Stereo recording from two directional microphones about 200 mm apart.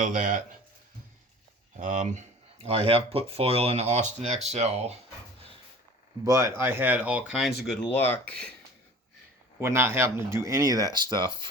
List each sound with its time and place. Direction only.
0.0 s speech: 40° right (ahead or behind)
1.7 s speech: 35° right (ahead or behind)
6.2 s speech: 15° right (ahead or behind); by 8.5 s 5° left (ahead or behind)
9.6 s speech: 10° right (ahead or behind)